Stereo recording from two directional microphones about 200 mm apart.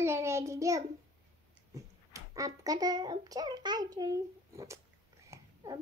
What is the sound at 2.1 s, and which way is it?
A child's voice, 15° right (ahead or behind).